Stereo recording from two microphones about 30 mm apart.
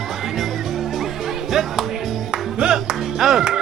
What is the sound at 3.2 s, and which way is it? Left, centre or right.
Music, centre.